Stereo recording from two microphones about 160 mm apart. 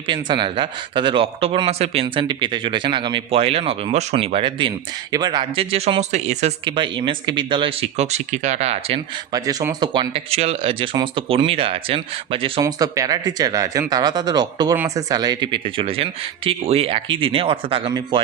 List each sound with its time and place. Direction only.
0.1 s speech: 30° right (ahead or behind)
6.7 s speech: 30° right (ahead or behind)
9.3 s speech: 25° right (ahead or behind)
12.6 s speech: 20° right (ahead or behind)